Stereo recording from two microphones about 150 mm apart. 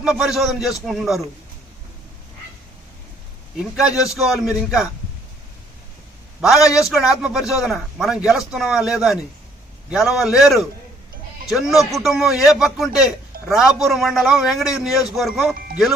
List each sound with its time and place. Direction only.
0.0 s a man's voice: 5° right (ahead or behind)
3.6 s a man's voice: 5° right (ahead or behind)
6.4 s a man's voice: centre (ahead or behind)
15.5 s speech: 75° right (ahead or behind)